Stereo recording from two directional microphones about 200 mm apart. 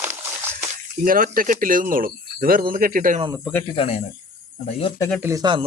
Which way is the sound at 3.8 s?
30° left (ahead or behind).